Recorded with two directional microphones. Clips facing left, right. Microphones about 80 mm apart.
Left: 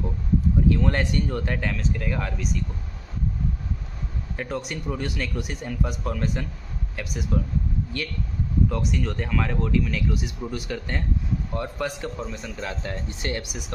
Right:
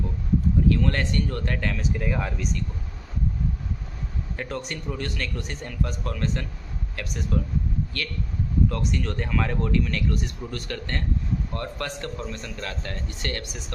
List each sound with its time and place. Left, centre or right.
0.7 s a man's voice: centre
1.7 s speech: centre
4.4 s a man's voice: centre
7.9 s speech: centre
8.7 s a man's voice: centre